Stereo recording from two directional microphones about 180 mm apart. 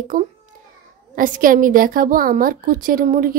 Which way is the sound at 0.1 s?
45° right (ahead or behind).